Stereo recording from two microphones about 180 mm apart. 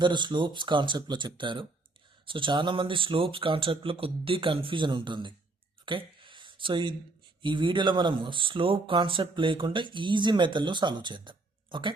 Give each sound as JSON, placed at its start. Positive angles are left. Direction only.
{"t": 0.0, "sound": "speech", "side_deg": -25}
{"t": 5.8, "sound": "a sound", "side_deg": -25}
{"t": 7.4, "sound": "speech", "side_deg": -25}